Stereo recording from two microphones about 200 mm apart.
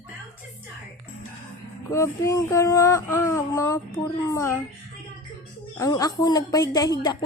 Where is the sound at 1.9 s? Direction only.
15° left (ahead or behind).